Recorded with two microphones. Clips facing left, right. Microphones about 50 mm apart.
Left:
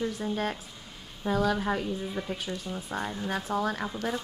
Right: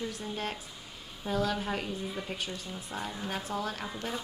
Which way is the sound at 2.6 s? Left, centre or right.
Centre.